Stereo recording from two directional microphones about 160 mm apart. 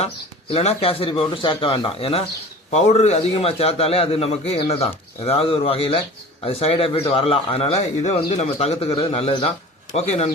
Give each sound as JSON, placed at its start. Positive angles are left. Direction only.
{"t": 0.5, "sound": "speech", "side_deg": 40}
{"t": 2.6, "sound": "speech", "side_deg": 45}